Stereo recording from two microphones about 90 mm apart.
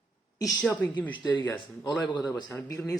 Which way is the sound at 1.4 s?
60° left (ahead or behind).